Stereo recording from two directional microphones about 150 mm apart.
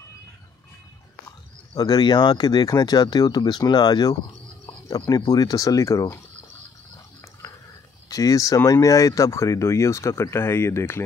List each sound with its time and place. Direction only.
1.8 s speech: 25° left (ahead or behind)
8.1 s speech: 20° left (ahead or behind)